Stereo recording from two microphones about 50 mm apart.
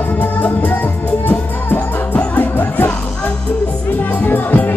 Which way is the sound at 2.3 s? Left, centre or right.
Left.